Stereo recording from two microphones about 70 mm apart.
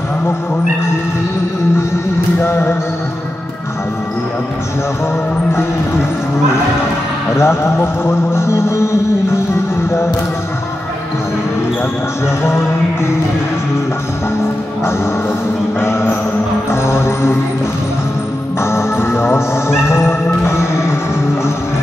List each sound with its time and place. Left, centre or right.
2.4 s music: left
7.3 s music: left
15.8 s music: left
18.6 s music: left